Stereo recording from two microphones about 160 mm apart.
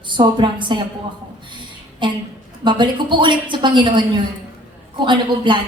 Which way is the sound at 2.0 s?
30° right (ahead or behind).